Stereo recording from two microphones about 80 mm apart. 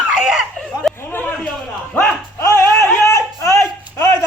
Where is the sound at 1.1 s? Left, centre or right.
Left.